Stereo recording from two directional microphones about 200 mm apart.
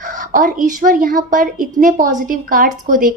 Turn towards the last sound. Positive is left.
turn(degrees=-40)  # may be behind; listen again after turning